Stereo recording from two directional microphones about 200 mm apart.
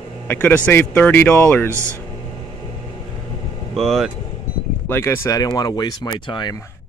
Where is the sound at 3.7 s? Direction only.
Centre (ahead or behind).